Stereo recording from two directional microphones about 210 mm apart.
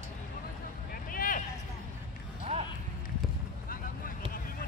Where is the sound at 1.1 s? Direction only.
40° left (ahead or behind).